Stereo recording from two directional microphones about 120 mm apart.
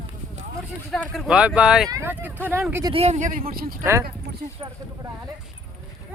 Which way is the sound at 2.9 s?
65° right (ahead or behind).